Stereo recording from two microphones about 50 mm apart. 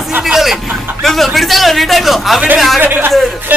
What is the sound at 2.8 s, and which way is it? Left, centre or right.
Speech, right.